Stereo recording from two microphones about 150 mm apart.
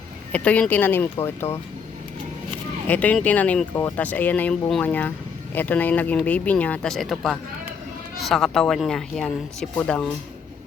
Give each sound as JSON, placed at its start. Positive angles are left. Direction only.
{"t": 0.3, "sound": "speech", "side_deg": 10}
{"t": 2.8, "sound": "speech", "side_deg": 10}